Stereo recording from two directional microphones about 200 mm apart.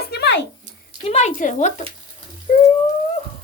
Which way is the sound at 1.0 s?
35° left (ahead or behind).